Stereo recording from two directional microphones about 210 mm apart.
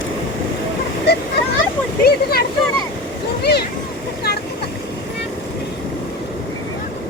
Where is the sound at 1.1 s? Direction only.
50° left (ahead or behind).